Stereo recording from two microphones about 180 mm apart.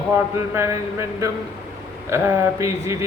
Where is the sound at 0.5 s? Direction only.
15° right (ahead or behind).